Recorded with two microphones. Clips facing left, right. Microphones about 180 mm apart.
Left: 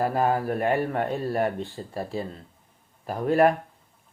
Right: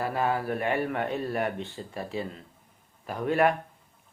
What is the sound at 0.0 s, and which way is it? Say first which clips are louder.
Speech: left 4 dB; 40° left (ahead or behind).